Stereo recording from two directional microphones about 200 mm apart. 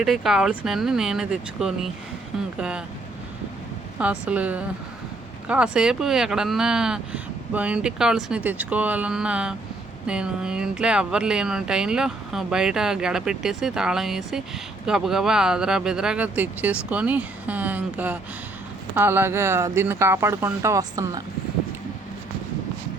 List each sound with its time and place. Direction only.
0.0 s speech: centre (ahead or behind)
3.9 s speech: 5° right (ahead or behind)